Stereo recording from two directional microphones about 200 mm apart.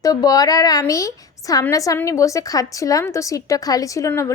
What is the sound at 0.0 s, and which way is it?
A woman's voice, 15° left (ahead or behind).